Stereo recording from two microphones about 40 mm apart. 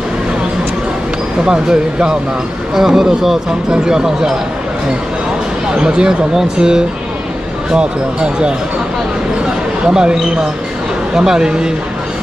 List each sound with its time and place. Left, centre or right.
1.4 s speech: right
2.7 s speech: centre
5.8 s speech: centre
9.8 s speech: right